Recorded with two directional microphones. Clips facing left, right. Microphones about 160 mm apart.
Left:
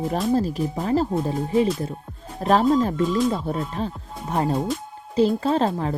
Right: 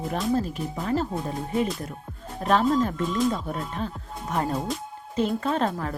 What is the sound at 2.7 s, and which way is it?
Speech, 30° left (ahead or behind).